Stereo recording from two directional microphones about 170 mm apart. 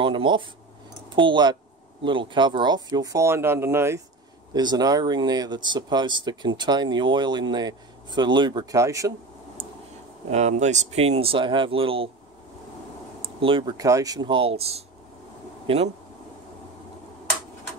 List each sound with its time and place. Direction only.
0.0 s speech: 30° right (ahead or behind)
10.3 s speech: 40° right (ahead or behind)
13.2 s speech: 30° right (ahead or behind)